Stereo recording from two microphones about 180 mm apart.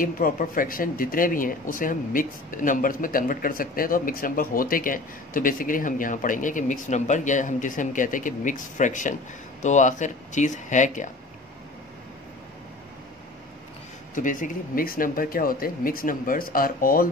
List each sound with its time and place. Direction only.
0.0 s speech: 50° left (ahead or behind)
14.1 s speech: 45° left (ahead or behind)